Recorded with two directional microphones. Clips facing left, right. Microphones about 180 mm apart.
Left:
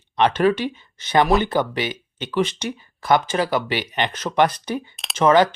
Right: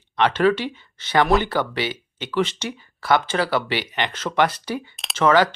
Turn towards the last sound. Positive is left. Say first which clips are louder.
# left 2 dB
turn(degrees=20)  # may be behind; listen again after turning